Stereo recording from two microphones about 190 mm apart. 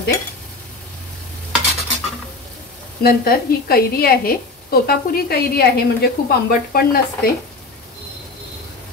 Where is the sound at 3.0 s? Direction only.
55° left (ahead or behind).